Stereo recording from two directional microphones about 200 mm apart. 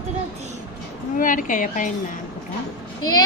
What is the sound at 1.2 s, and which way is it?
Speech, 40° left (ahead or behind).